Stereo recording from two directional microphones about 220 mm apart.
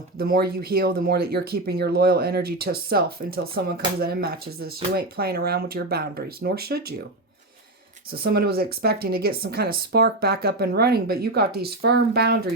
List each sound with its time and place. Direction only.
0.2 s speech: 45° right (ahead or behind)
8.1 s speech: 45° right (ahead or behind)